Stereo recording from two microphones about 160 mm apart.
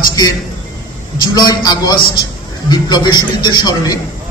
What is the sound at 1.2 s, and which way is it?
A man's voice, 25° left (ahead or behind).